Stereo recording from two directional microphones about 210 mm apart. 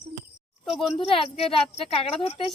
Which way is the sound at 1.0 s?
30° left (ahead or behind).